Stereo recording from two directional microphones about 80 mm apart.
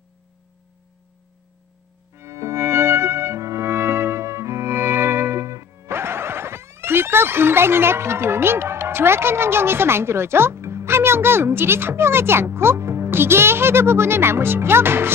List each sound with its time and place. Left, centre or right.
2.1 s music: right